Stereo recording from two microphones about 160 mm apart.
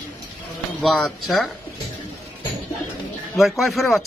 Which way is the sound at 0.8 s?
Centre (ahead or behind).